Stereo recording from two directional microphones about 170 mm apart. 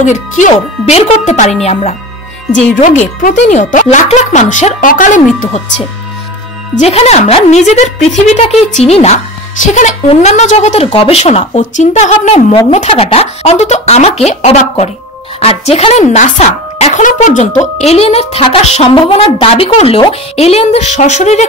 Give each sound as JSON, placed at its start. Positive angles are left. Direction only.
{"t": 0.0, "sound": "a woman's voice", "side_deg": 45}
{"t": 6.8, "sound": "a woman's voice", "side_deg": 40}